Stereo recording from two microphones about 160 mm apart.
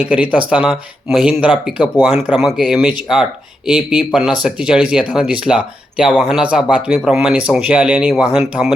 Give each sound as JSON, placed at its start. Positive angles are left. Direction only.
{"t": 0.0, "sound": "speech", "side_deg": -10}